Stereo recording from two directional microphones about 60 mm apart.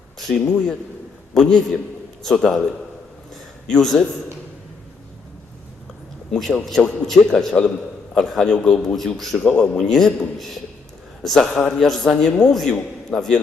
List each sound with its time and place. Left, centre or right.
0.2 s a man's voice: centre
6.3 s a man's voice: centre
9.0 s a man's voice: centre